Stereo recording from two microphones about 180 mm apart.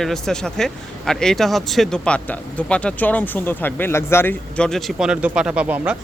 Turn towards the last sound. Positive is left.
turn(degrees=-10)  # may be behind; listen again after turning